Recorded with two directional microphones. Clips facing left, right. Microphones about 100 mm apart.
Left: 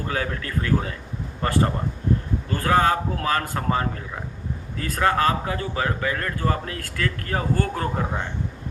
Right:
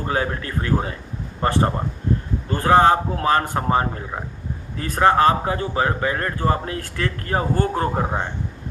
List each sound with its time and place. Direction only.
0.0 s speech: 30° right (ahead or behind)